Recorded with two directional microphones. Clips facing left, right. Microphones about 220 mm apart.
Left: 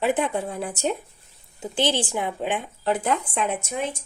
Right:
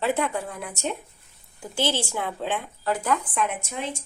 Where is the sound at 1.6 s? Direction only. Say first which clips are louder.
Left 3 dB; 20° left (ahead or behind).